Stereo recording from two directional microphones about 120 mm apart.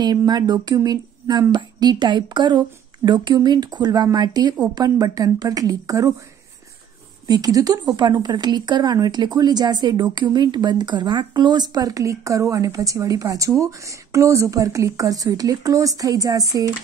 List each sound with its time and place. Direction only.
0.0 s speech: 35° right (ahead or behind)
7.2 s speech: 30° right (ahead or behind)